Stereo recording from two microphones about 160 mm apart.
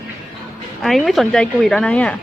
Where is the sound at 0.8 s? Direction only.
Centre (ahead or behind).